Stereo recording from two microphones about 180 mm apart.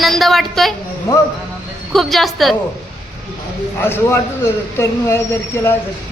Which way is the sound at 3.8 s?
15° left (ahead or behind).